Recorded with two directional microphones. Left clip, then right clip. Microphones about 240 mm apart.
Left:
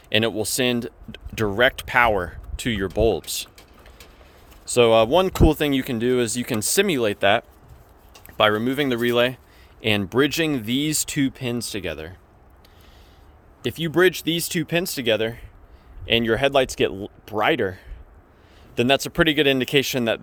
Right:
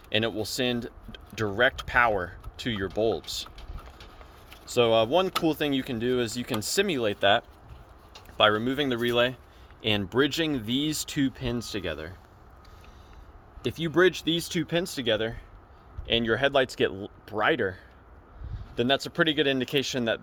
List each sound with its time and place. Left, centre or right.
0.1 s speech: left
4.6 s speech: left
13.7 s speech: left